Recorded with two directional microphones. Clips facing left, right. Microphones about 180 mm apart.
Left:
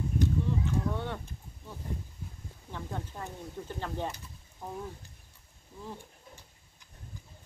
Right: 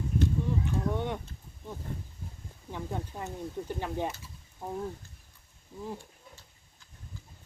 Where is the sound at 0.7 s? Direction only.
15° right (ahead or behind).